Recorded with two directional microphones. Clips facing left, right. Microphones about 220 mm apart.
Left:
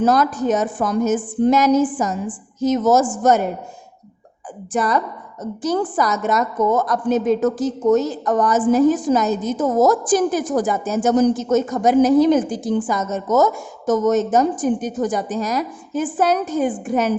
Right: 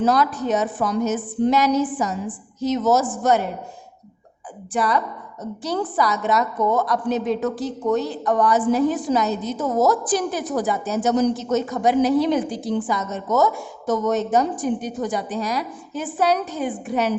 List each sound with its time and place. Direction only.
0.0 s a woman's voice: 45° left (ahead or behind)
4.7 s a woman's voice: 45° left (ahead or behind)